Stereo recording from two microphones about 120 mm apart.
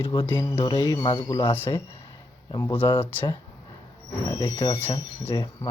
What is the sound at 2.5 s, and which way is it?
Speech, 35° left (ahead or behind).